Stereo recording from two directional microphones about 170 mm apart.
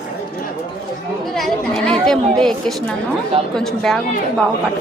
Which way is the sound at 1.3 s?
Centre (ahead or behind).